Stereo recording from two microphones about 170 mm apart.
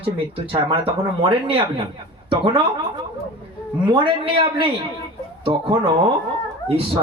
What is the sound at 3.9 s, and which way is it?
Speech, 30° right (ahead or behind).